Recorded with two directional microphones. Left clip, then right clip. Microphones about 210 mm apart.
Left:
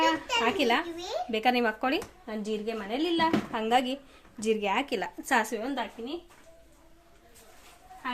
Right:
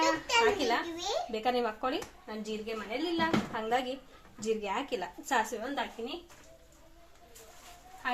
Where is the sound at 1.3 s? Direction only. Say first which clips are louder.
Left 8 dB; 40° left (ahead or behind).